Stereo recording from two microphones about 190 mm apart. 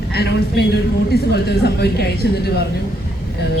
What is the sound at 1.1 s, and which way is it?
A woman's voice, 60° left (ahead or behind).